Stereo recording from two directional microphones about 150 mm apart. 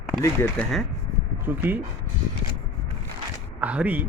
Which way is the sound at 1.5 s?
10° right (ahead or behind).